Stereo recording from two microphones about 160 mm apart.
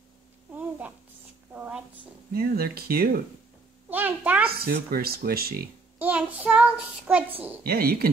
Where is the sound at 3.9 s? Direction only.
10° right (ahead or behind).